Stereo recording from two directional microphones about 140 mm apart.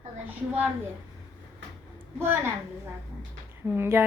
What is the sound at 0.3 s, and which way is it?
Speech, 10° right (ahead or behind).